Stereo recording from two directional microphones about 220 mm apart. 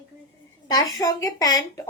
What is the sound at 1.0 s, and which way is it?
Speech, 15° left (ahead or behind).